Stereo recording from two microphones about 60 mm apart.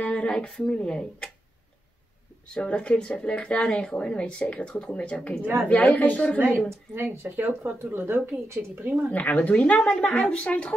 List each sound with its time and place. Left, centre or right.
0.0 s a sound: centre
0.5 s speech: centre
2.4 s speech: centre
7.0 s speech: right
9.1 s speech: left